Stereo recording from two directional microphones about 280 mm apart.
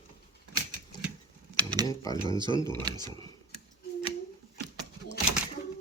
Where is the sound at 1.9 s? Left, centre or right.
Centre.